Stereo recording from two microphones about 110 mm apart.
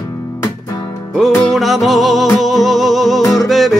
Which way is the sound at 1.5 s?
Centre (ahead or behind).